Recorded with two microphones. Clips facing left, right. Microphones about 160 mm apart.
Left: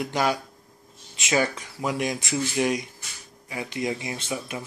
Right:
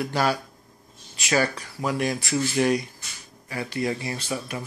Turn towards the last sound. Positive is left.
turn(degrees=20)  # may be behind; listen again after turning